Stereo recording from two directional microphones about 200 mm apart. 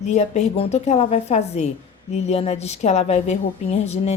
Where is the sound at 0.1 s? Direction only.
35° left (ahead or behind).